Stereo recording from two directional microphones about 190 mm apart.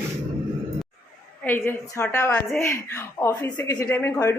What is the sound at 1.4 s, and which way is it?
A woman's voice, 10° left (ahead or behind).